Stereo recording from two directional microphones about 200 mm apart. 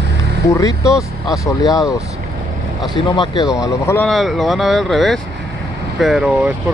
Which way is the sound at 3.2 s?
20° left (ahead or behind).